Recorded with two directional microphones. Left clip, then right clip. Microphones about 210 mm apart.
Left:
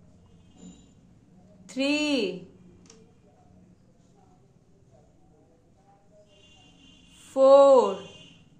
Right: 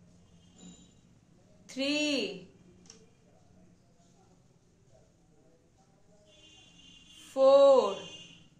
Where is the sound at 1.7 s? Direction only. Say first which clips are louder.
Left 5 dB; 25° left (ahead or behind).